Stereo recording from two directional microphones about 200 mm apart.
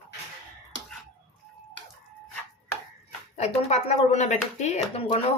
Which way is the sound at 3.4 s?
35° left (ahead or behind).